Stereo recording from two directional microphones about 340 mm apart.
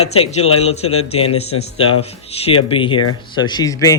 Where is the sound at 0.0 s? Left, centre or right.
Centre.